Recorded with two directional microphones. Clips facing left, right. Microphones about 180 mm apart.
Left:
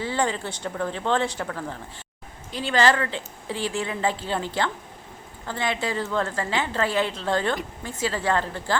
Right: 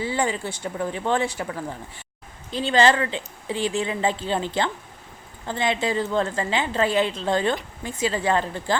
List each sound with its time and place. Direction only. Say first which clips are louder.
0.0 s speech: right 1 dB; 10° right (ahead or behind)
2.5 s a woman's voice: right 2 dB; 25° right (ahead or behind)